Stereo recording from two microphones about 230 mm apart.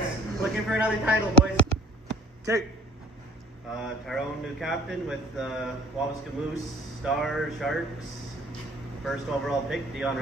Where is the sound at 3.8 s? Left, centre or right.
Centre.